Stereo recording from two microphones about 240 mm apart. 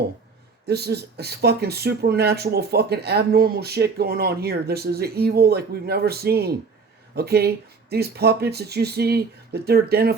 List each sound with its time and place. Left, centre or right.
0.7 s speech: right